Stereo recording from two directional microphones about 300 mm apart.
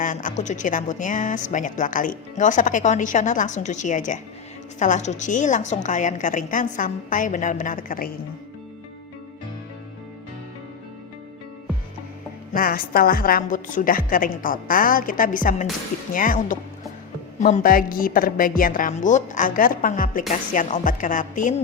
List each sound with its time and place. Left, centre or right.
0.0 s speech: left
12.5 s speech: left